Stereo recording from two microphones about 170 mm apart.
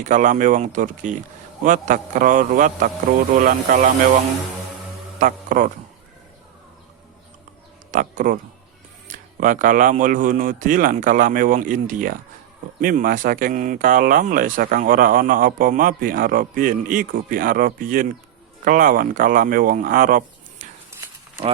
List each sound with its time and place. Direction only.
0.0 s speech: 50° right (ahead or behind)
5.2 s speech: 50° right (ahead or behind)
7.9 s speech: 50° right (ahead or behind)